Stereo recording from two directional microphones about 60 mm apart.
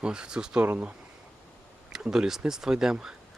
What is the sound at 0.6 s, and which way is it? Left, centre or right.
Speech, right.